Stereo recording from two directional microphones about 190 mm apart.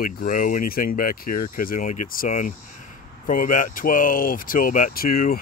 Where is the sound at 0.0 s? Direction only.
45° left (ahead or behind).